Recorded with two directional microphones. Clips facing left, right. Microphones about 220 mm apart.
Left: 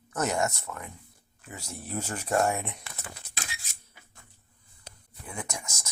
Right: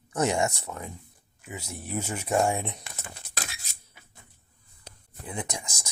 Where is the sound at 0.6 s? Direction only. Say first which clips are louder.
Right 2 dB; 30° right (ahead or behind).